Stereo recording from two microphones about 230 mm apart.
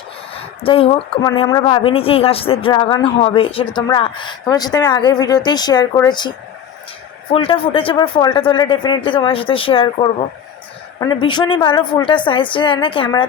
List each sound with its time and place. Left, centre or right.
0.3 s a woman's voice: left
7.3 s a woman's voice: left